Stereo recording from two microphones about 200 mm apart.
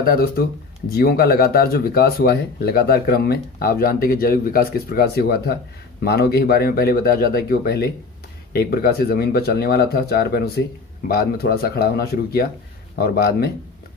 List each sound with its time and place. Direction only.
0.0 s speech: 45° left (ahead or behind)